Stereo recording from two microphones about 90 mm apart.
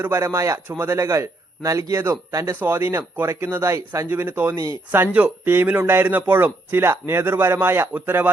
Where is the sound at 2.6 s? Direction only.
25° right (ahead or behind).